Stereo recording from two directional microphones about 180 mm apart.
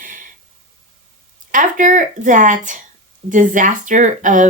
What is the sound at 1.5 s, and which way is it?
Speech, 45° right (ahead or behind).